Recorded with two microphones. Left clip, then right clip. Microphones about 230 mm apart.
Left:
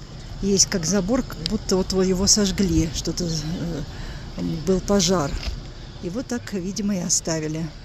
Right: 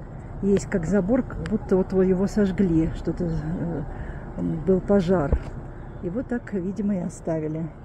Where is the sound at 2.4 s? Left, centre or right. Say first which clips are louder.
Even; centre.